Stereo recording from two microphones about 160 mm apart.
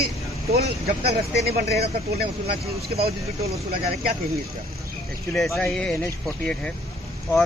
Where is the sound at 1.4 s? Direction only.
80° right.